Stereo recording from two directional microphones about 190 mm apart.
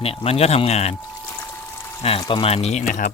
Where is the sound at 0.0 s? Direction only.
30° left (ahead or behind).